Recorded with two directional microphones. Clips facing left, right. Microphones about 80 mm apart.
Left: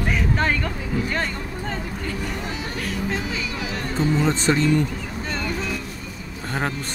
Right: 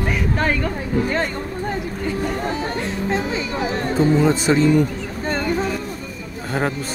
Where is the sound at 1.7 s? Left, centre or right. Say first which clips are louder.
Right 4 dB; centre.